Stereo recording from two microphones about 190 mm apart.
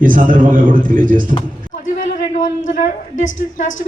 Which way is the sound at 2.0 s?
45° left (ahead or behind).